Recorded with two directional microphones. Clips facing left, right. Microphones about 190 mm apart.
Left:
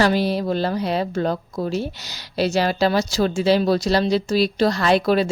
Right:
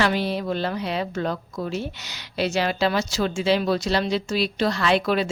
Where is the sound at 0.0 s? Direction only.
40° left (ahead or behind).